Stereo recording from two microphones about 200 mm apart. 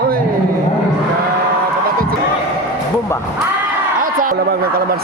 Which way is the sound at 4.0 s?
45° right (ahead or behind).